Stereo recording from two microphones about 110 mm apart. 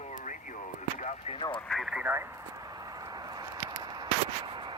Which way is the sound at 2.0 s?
20° right (ahead or behind).